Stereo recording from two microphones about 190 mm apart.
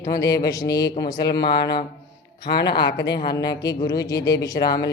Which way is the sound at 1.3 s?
60° left (ahead or behind).